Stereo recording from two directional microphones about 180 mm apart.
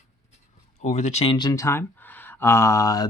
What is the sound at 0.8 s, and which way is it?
Speech, 40° left (ahead or behind).